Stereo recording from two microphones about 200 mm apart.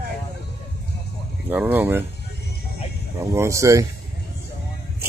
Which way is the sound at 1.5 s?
10° right (ahead or behind).